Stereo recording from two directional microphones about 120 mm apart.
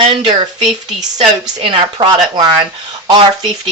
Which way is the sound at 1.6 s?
45° right (ahead or behind).